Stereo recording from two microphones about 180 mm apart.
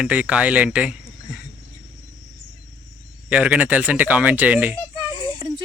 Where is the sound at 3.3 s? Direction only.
5° right (ahead or behind).